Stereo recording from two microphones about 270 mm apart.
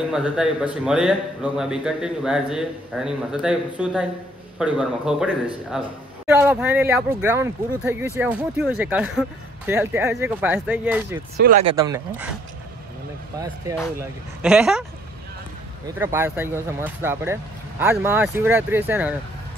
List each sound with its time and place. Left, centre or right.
0.1 s speech: centre
11.3 s speech: right
11.6 s speech: centre
14.4 s speech: centre
16.0 s speech: centre